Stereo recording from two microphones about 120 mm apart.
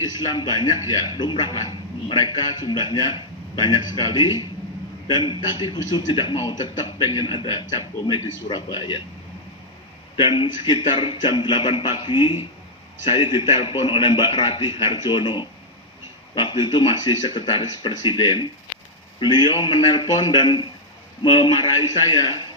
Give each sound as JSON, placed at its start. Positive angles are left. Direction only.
{"t": 0.0, "sound": "a man's voice", "side_deg": 35}
{"t": 10.2, "sound": "a man's voice", "side_deg": 45}